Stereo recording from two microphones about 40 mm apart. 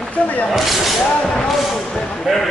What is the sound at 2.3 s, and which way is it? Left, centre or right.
Basketball bounce, centre.